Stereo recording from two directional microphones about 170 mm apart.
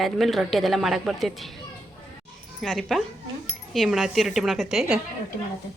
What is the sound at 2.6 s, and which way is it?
A woman's voice, centre (ahead or behind).